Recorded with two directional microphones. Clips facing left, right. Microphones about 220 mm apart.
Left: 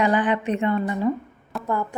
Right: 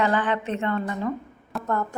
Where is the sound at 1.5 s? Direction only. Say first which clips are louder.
Left 1 dB; 10° left (ahead or behind).